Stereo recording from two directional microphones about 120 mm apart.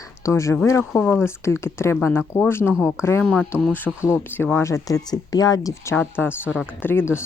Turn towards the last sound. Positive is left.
turn(degrees=20)  # may be behind; listen again after turning